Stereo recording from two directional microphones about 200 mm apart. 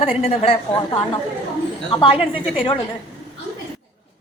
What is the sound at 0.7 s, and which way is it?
A woman's voice, 20° left (ahead or behind).